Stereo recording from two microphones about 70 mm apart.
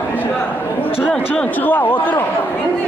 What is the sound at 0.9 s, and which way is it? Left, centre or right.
Chatter, left.